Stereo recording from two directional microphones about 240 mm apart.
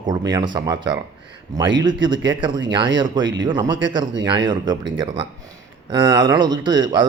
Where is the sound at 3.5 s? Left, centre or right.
Centre.